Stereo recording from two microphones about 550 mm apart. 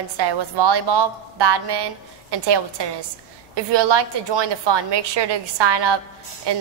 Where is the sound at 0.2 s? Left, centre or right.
Right.